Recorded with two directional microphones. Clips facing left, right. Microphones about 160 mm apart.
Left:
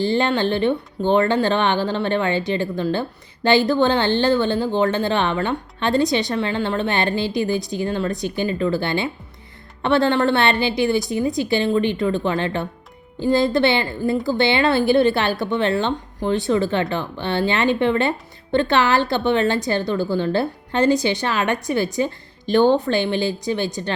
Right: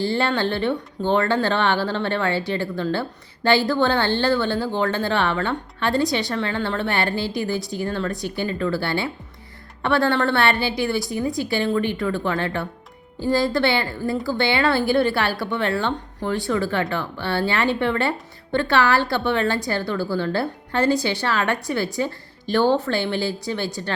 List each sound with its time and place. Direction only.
0.0 s speech: 20° left (ahead or behind)